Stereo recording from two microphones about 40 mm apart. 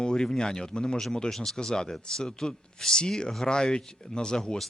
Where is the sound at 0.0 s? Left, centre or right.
Left.